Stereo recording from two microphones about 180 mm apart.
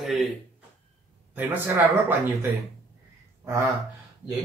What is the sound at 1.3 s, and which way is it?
A man's voice, 10° right (ahead or behind).